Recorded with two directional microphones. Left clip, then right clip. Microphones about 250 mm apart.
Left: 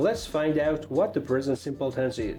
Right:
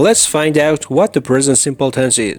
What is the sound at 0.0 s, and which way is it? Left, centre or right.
Speech, right.